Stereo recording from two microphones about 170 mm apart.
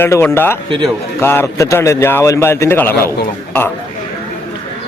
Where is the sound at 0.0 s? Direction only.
15° left (ahead or behind).